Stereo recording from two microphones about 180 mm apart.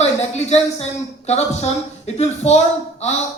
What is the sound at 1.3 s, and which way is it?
A man's voice, 35° left (ahead or behind).